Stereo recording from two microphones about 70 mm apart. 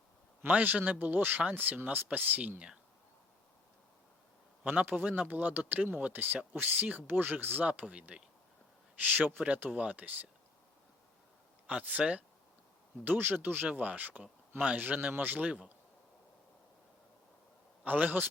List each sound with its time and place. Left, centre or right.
0.4 s speech: right
4.6 s speech: right
11.6 s speech: centre
17.8 s speech: right